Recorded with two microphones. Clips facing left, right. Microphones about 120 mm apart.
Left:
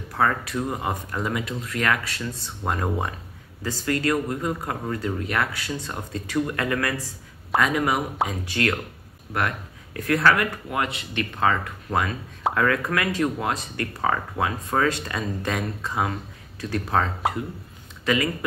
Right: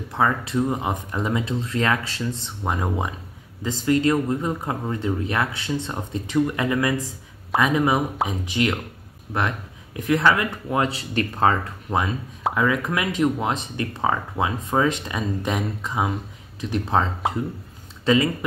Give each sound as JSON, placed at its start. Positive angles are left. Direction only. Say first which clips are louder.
{"t": 0.1, "sound": "speech", "louder": "right 1 dB", "side_deg": -20}
{"t": 9.9, "sound": "speech", "louder": "right 1 dB", "side_deg": -20}
{"t": 11.9, "sound": "speech", "louder": "right 1 dB", "side_deg": -20}